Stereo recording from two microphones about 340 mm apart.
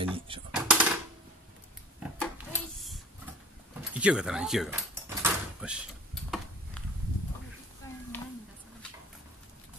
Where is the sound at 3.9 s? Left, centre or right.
Centre.